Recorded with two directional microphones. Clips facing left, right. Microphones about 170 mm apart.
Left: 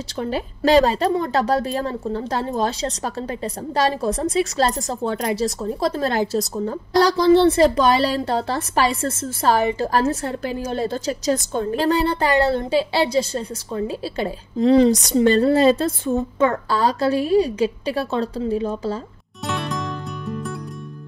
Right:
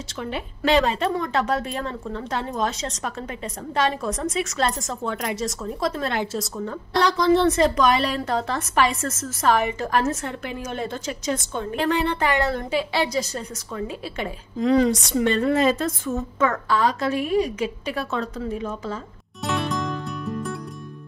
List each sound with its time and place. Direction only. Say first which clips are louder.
0.2 s a woman's voice: left 5 dB; 35° left (ahead or behind)
19.4 s music: right 1 dB; centre (ahead or behind)